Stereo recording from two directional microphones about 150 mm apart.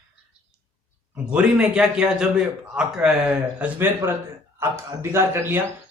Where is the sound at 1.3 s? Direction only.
5° right (ahead or behind).